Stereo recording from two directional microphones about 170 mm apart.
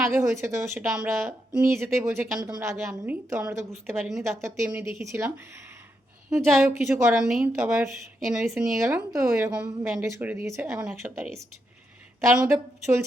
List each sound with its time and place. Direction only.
0.1 s a woman's voice: 15° right (ahead or behind)
3.8 s speech: 5° right (ahead or behind)
4.2 s a woman's voice: 15° right (ahead or behind)
6.5 s speech: 5° right (ahead or behind)
6.9 s a woman's voice: 15° right (ahead or behind)
7.3 s speech: 5° right (ahead or behind)
7.5 s a woman's voice: 15° right (ahead or behind)
12.3 s a woman's voice: 10° right (ahead or behind)